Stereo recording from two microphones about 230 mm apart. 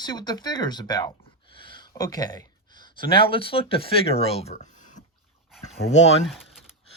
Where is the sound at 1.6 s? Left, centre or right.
Left.